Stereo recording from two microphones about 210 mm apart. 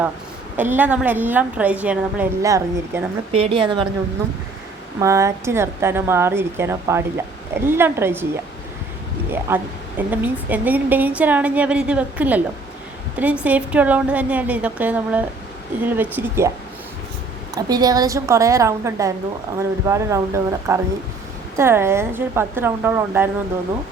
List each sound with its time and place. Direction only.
0.5 s a woman's voice: 10° right (ahead or behind)
3.3 s speech: 25° right (ahead or behind)
4.9 s a woman's voice: 15° right (ahead or behind)
9.5 s a woman's voice: 10° right (ahead or behind)
17.5 s a woman's voice: 20° right (ahead or behind)